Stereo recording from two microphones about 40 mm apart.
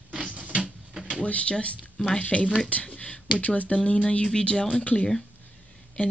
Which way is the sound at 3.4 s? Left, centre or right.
Left.